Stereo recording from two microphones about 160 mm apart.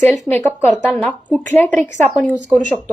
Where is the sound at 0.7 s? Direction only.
5° right (ahead or behind).